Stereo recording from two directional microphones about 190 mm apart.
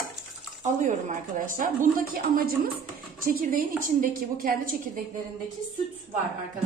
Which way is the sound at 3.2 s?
45° right (ahead or behind).